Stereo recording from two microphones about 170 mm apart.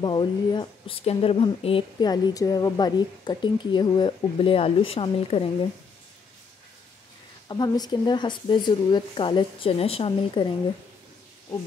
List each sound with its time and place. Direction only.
0.0 s a woman's voice: 25° left (ahead or behind)
7.4 s a woman's voice: 25° left (ahead or behind)